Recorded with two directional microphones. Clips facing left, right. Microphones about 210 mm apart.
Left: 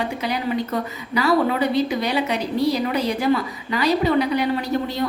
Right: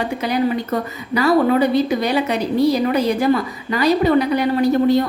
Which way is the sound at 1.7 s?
45° right (ahead or behind).